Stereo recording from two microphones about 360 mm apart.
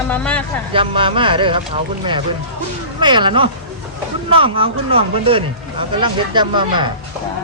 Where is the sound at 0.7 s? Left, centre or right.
Centre.